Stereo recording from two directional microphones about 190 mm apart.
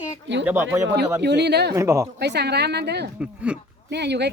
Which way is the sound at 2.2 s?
60° right (ahead or behind).